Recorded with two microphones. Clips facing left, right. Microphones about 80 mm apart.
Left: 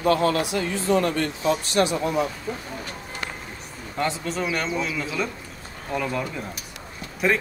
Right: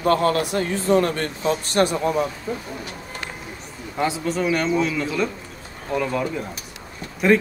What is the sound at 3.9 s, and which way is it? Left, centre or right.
Speech, centre.